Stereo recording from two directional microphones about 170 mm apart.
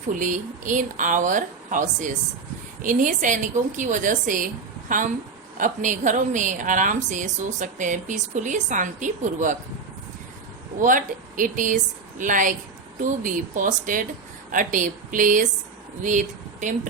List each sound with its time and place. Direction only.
0.1 s a woman's voice: 50° right (ahead or behind)
10.8 s a woman's voice: 50° right (ahead or behind)